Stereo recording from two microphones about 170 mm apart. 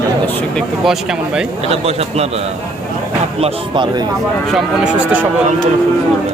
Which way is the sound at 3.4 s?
30° right (ahead or behind).